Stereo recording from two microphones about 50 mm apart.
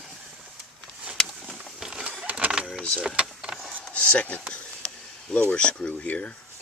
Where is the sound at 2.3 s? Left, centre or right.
Right.